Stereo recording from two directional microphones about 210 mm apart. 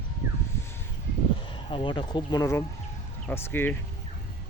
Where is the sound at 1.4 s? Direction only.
25° left (ahead or behind).